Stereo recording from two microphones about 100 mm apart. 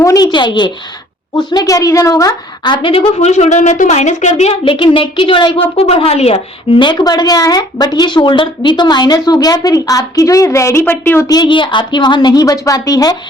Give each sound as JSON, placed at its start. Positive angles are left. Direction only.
{"t": 0.0, "sound": "a sound", "side_deg": 30}
{"t": 0.3, "sound": "a woman's voice", "side_deg": 50}
{"t": 1.4, "sound": "speech", "side_deg": 40}
{"t": 2.8, "sound": "a woman's voice", "side_deg": 70}
{"t": 4.4, "sound": "a woman's voice", "side_deg": 75}
{"t": 6.7, "sound": "speech", "side_deg": 50}
{"t": 11.3, "sound": "speech", "side_deg": 40}
{"t": 11.5, "sound": "a woman's voice", "side_deg": 50}